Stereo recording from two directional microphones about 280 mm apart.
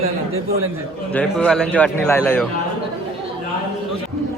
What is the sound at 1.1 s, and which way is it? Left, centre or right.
A man's voice, centre.